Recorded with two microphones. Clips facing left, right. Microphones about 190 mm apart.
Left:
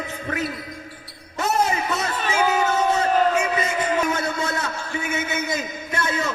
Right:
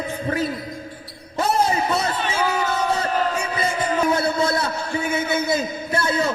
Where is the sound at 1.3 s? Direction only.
35° right (ahead or behind).